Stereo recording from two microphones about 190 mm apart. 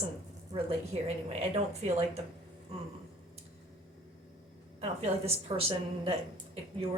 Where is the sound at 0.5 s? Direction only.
35° right (ahead or behind).